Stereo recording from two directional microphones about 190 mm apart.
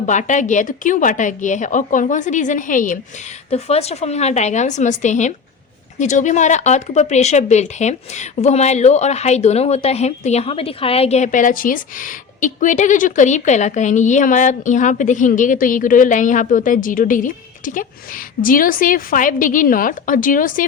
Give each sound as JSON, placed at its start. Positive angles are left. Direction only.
{"t": 0.0, "sound": "speech", "side_deg": 40}
{"t": 3.5, "sound": "speech", "side_deg": 35}